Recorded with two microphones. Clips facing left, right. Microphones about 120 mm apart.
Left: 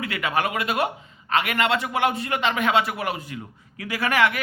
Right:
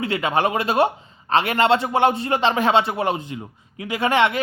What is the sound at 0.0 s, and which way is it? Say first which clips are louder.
Speech: right 4 dB; 30° right (ahead or behind).